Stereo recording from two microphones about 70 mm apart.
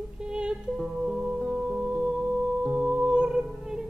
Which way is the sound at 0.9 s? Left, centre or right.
Centre.